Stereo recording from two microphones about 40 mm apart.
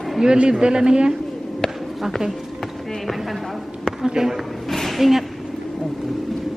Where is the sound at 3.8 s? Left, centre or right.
Centre.